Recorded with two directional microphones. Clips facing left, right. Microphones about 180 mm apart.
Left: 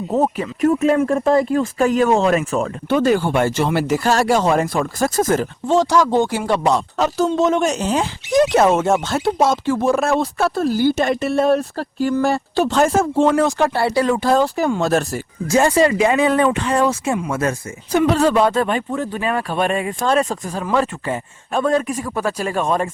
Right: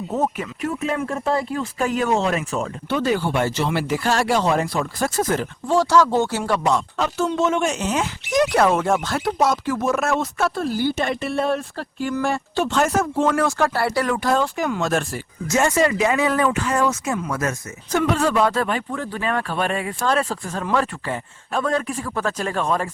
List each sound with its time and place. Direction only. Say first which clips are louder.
0.1 s speech: left 5 dB; 35° left (ahead or behind)
5.6 s a man's voice: left 1 dB; 20° left (ahead or behind)
6.6 s a man's voice: left 3 dB; 35° left (ahead or behind); by 22.6 s 10° left (ahead or behind)
22.6 s speech: left 3 dB; 20° left (ahead or behind)